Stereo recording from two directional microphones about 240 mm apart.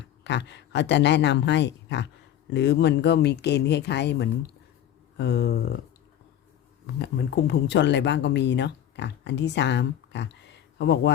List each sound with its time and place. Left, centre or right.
0.3 s speech: left
7.0 s speech: left